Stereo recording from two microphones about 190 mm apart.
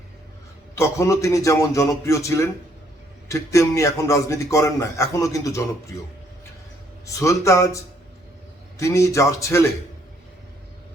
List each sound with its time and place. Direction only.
0.8 s a man's voice: 15° left (ahead or behind)
7.0 s a man's voice: 15° left (ahead or behind)